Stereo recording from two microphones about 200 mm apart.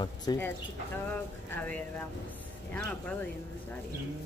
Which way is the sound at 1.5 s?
10° left (ahead or behind).